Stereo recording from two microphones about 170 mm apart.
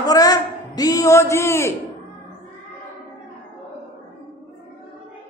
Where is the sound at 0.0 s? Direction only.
20° left (ahead or behind).